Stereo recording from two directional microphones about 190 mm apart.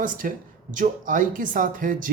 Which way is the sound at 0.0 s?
45° right (ahead or behind).